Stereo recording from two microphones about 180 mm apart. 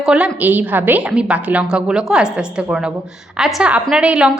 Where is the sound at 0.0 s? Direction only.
5° right (ahead or behind).